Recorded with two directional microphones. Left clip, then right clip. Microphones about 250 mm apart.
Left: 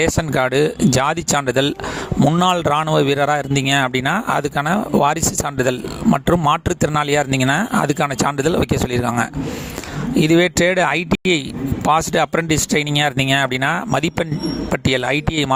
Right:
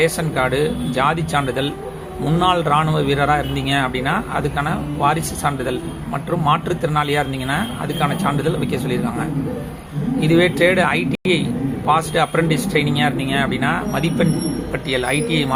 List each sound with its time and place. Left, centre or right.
0.0 s speech: left